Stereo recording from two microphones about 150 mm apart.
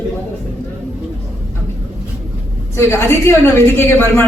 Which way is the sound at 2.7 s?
15° left (ahead or behind).